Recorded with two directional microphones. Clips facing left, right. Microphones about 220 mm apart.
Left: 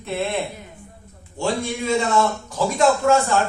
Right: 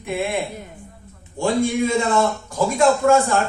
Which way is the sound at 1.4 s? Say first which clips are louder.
Right 5 dB; 50° right (ahead or behind).